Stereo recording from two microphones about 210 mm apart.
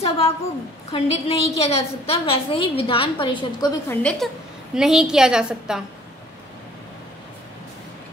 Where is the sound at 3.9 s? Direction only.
5° left (ahead or behind).